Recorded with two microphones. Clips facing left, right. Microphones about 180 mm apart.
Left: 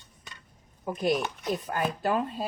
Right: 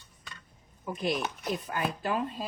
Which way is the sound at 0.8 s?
45° left (ahead or behind).